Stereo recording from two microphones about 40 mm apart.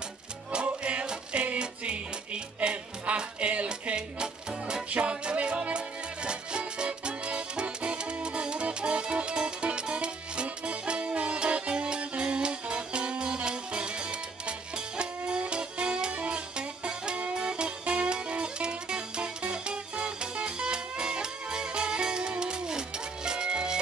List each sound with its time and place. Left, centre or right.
0.5 s music: right
4.9 s music: right